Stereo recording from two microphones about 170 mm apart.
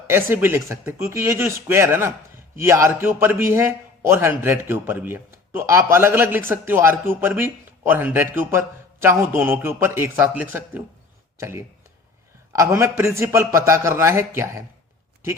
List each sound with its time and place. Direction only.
0.1 s a man's voice: 15° right (ahead or behind)